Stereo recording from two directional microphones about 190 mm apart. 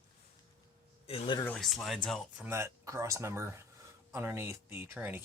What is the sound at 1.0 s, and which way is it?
Speech, 30° left (ahead or behind).